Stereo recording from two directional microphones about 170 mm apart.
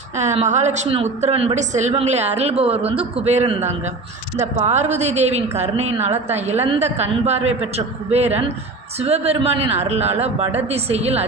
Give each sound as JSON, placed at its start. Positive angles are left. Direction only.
{"t": 0.2, "sound": "a woman's voice", "side_deg": -45}